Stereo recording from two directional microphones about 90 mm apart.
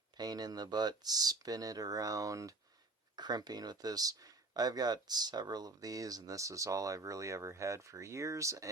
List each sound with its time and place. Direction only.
0.2 s speech: 50° right (ahead or behind)
3.2 s speech: 50° right (ahead or behind)